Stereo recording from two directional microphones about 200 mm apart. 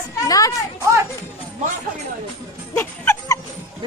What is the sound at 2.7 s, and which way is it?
Music, 10° left (ahead or behind).